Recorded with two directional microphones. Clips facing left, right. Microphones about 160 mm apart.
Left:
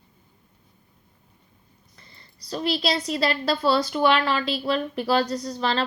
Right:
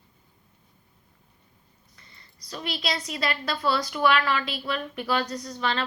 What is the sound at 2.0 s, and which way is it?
A woman's voice, 30° left (ahead or behind).